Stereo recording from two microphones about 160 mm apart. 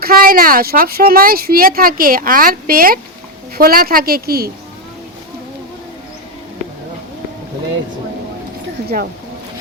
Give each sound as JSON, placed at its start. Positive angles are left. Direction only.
{"t": 0.0, "sound": "a woman's voice", "side_deg": -65}